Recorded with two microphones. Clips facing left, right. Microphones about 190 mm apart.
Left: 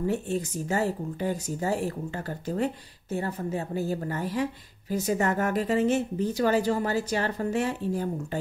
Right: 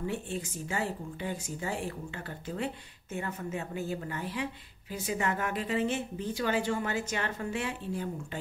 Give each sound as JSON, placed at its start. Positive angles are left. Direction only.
{"t": 0.0, "sound": "speech", "side_deg": 40}